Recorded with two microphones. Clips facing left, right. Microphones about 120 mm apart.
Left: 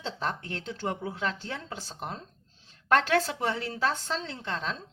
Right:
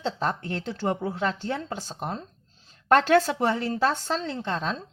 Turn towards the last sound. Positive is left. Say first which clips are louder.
# right 5 dB
turn(degrees=-40)  # may be behind; listen again after turning